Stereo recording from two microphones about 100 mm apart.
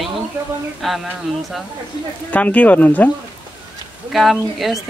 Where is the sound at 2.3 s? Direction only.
15° left (ahead or behind).